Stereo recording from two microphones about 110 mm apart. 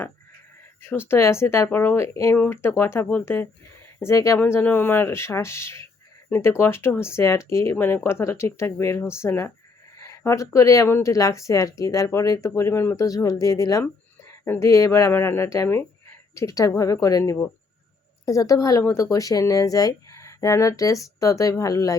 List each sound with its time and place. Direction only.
0.8 s a woman's voice: 20° left (ahead or behind)